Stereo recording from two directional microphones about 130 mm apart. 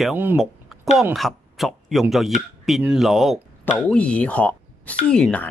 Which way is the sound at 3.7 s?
10° left (ahead or behind).